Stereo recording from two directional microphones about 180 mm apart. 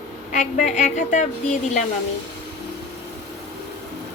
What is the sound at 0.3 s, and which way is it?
A woman's voice, 45° left (ahead or behind).